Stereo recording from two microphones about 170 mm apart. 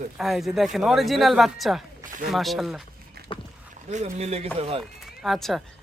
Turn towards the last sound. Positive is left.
turn(degrees=0)  # may be behind; listen again after turning